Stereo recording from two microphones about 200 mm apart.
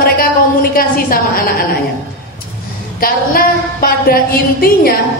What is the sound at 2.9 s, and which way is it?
A woman's voice, 45° left (ahead or behind).